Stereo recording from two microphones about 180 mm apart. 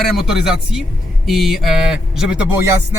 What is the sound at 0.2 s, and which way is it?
Speech, 5° right (ahead or behind).